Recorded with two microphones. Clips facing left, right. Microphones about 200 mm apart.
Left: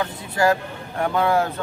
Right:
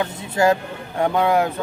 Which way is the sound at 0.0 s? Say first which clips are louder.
Right 2 dB; 25° right (ahead or behind).